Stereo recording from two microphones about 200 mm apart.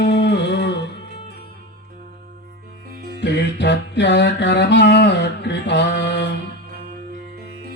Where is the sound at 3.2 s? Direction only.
60° left (ahead or behind).